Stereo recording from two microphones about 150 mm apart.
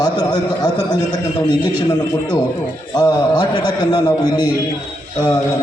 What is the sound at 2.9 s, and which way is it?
A man's voice, 30° left (ahead or behind).